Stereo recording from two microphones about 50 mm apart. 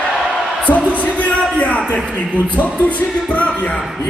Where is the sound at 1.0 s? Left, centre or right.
Left.